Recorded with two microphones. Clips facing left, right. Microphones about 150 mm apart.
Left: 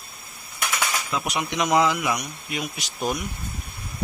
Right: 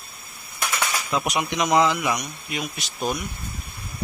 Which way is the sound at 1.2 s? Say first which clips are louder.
Right 2 dB; 15° right (ahead or behind).